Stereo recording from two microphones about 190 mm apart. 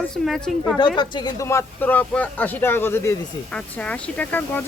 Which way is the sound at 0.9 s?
20° left (ahead or behind).